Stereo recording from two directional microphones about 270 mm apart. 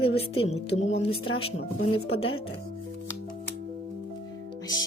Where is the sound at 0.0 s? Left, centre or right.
Left.